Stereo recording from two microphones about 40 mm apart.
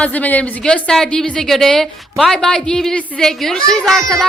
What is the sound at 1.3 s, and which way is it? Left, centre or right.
Speech, centre.